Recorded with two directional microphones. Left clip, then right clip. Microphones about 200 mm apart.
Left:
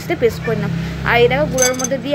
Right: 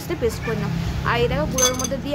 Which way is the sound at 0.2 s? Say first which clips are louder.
Left 7 dB; 10° left (ahead or behind).